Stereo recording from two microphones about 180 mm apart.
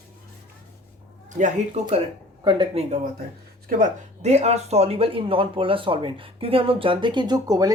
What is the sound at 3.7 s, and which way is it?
Speech, 50° right (ahead or behind).